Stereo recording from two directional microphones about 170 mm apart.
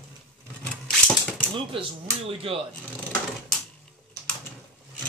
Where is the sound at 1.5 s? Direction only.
30° right (ahead or behind).